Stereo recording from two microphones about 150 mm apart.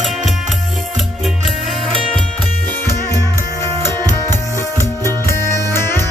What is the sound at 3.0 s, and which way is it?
Music, 20° left (ahead or behind).